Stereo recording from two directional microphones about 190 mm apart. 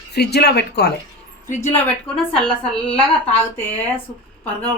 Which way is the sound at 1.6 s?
15° left (ahead or behind).